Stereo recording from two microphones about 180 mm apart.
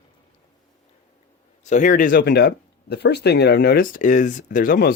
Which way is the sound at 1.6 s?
45° left (ahead or behind).